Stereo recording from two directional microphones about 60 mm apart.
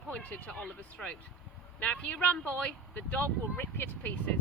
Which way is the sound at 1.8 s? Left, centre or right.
Left.